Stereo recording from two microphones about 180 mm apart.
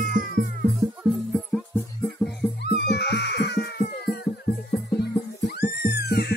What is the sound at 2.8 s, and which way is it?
Music, 65° left (ahead or behind).